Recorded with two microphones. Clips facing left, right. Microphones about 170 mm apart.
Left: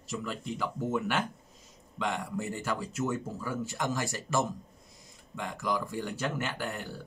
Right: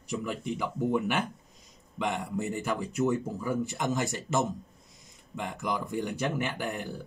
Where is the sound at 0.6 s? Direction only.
15° right (ahead or behind).